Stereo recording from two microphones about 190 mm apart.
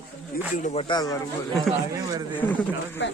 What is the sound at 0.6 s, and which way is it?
Speech, 30° left (ahead or behind).